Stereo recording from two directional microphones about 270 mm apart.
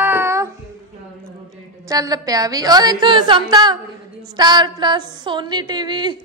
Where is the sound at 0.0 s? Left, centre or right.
Centre.